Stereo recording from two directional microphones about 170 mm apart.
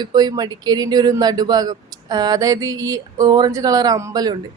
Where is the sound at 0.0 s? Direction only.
25° right (ahead or behind).